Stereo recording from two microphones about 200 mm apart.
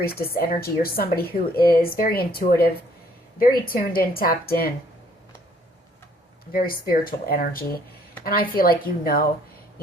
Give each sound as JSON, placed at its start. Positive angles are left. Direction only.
{"t": 0.0, "sound": "a woman's voice", "side_deg": 50}
{"t": 6.5, "sound": "a woman's voice", "side_deg": 45}